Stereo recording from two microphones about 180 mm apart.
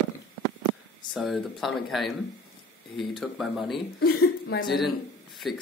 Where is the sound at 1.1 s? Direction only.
Centre (ahead or behind).